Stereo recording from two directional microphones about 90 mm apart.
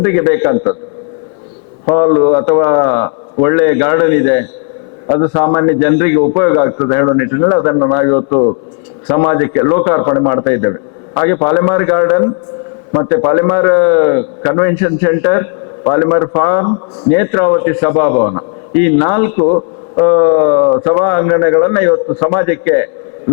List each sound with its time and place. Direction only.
0.0 s a man's voice: 15° left (ahead or behind)
1.9 s a man's voice: 15° left (ahead or behind)